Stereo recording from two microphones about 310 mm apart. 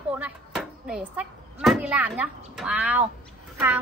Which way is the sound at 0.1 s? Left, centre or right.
Centre.